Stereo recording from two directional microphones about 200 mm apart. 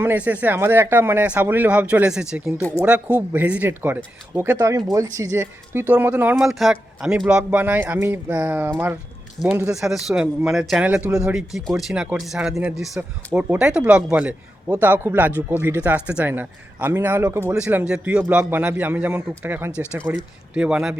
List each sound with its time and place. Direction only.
0.0 s speech: 10° right (ahead or behind)